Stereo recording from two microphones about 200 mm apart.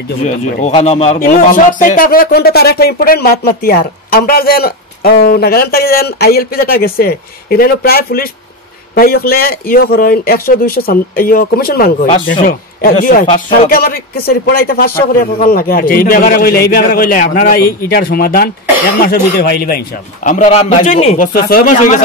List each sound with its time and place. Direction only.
0.2 s a man's voice: 35° left (ahead or behind)
1.2 s a man's voice: 45° left (ahead or behind)
21.3 s speech: 45° left (ahead or behind)